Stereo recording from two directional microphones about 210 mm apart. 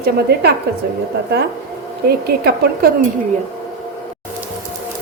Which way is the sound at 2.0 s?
50° right (ahead or behind).